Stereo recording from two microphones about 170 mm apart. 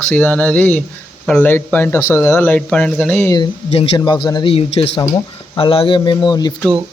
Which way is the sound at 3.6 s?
35° left (ahead or behind).